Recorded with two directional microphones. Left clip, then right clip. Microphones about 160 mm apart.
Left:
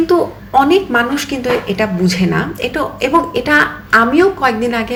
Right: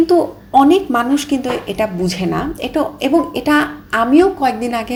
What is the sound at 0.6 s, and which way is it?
A woman's voice, 45° right (ahead or behind).